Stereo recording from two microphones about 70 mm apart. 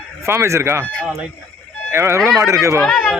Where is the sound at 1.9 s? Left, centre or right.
Right.